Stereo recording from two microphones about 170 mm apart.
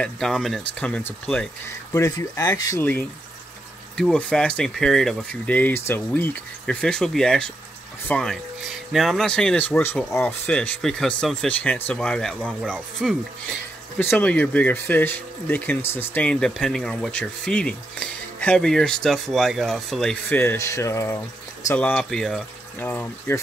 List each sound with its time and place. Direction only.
0.0 s speech: centre (ahead or behind)
2.0 s speech: 20° left (ahead or behind)